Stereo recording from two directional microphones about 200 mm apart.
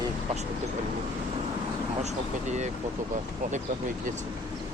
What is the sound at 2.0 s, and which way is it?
Speech, 35° right (ahead or behind).